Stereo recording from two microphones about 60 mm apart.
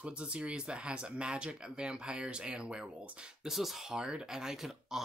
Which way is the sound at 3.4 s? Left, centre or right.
Centre.